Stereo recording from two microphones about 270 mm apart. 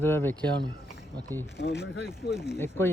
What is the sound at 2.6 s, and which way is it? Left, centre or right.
Speech, centre.